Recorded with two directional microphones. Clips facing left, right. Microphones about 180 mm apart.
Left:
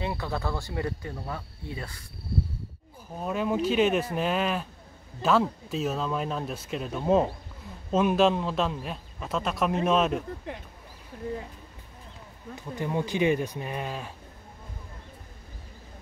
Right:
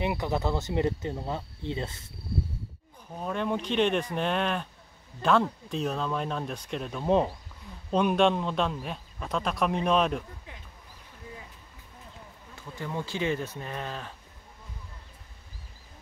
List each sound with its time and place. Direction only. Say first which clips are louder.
0.0 s speech: right 3 dB; 20° right (ahead or behind)
3.2 s speech: left 3 dB; 5° left (ahead or behind)
12.5 s speech: left 5 dB; 20° left (ahead or behind)